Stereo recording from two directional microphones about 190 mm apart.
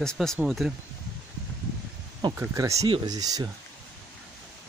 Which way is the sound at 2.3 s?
15° right (ahead or behind).